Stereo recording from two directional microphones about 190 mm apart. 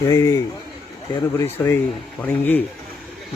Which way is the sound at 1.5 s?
15° left (ahead or behind).